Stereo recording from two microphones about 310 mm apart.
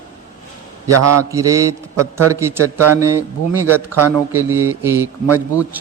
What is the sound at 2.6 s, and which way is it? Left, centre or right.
Speech, right.